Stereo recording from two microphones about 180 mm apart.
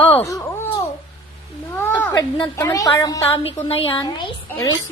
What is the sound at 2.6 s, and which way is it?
Speech, 15° left (ahead or behind).